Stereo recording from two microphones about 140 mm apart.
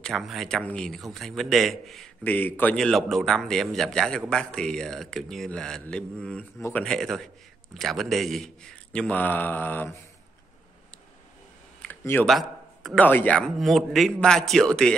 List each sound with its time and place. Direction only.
0.0 s a man's voice: centre (ahead or behind)
2.2 s a man's voice: 15° left (ahead or behind)
12.0 s speech: 15° left (ahead or behind)
12.3 s a sound: centre (ahead or behind)
13.0 s a man's voice: 10° left (ahead or behind)